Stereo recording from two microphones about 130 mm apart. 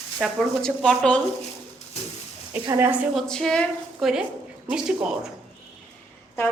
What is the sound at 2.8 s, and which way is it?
Speech, 10° right (ahead or behind).